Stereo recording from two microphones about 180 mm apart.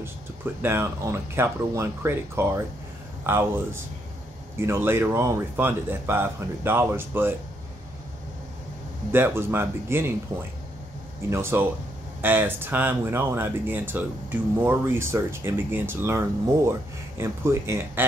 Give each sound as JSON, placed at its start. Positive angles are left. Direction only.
{"t": 0.6, "sound": "speech", "side_deg": -15}
{"t": 9.1, "sound": "speech", "side_deg": -10}
{"t": 11.2, "sound": "speech", "side_deg": -15}